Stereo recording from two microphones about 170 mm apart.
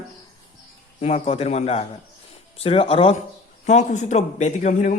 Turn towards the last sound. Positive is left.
turn(degrees=45)  # may be behind; listen again after turning